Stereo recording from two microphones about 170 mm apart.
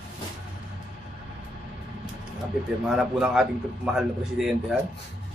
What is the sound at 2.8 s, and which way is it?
A man's voice, 5° right (ahead or behind).